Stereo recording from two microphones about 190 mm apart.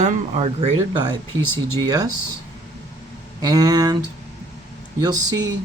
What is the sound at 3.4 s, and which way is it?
Speech, 20° right (ahead or behind).